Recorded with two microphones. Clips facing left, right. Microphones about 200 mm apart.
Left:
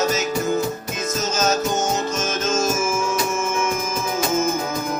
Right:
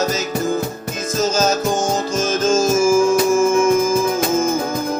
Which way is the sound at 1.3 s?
30° right (ahead or behind).